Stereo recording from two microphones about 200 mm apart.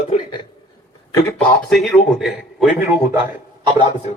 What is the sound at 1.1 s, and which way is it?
A man's voice, 5° left (ahead or behind).